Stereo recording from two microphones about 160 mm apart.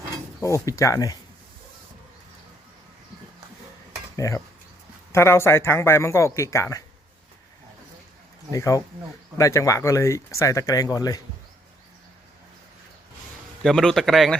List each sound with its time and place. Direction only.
0.4 s speech: 20° left (ahead or behind)
4.2 s speech: 20° left (ahead or behind)
8.4 s speech: 20° left (ahead or behind)
13.6 s speech: 5° left (ahead or behind)